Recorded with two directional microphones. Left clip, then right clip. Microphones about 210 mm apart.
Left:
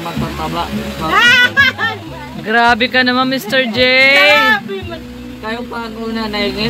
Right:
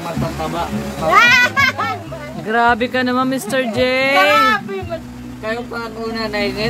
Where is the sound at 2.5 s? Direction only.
10° right (ahead or behind).